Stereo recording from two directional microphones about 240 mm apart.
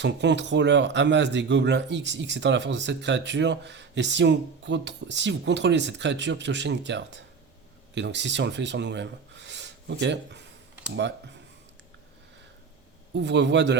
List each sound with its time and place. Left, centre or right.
0.0 s speech: right
13.1 s speech: right